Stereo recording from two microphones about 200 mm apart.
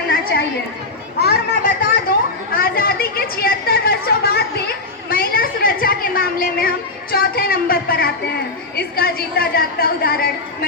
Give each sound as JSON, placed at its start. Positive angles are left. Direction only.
{"t": 0.1, "sound": "chatter", "side_deg": 50}
{"t": 5.0, "sound": "a sound", "side_deg": 50}
{"t": 8.7, "sound": "a woman's voice", "side_deg": 50}